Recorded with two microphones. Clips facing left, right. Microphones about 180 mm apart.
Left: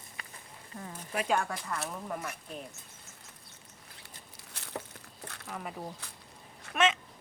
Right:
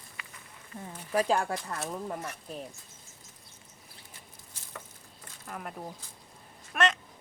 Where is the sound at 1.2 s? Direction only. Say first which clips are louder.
Right 4 dB; 35° right (ahead or behind).